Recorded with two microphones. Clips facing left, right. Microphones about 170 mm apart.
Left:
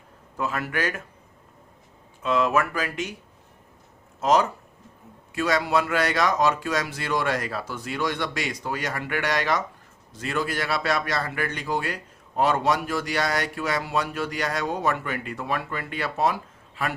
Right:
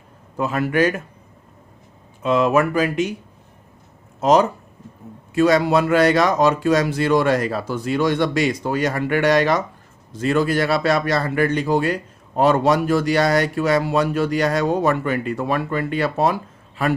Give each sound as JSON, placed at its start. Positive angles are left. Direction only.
{"t": 0.3, "sound": "speech", "side_deg": -20}
{"t": 2.2, "sound": "speech", "side_deg": -20}
{"t": 4.2, "sound": "speech", "side_deg": -20}